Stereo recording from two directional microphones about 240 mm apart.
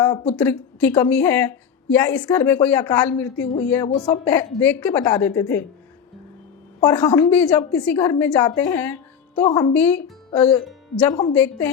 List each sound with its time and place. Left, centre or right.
0.0 s a sound: centre
0.3 s a woman's voice: centre
3.8 s speech: left
4.3 s a woman's voice: centre
6.9 s a woman's voice: centre
10.7 s music: centre
11.1 s a woman's voice: centre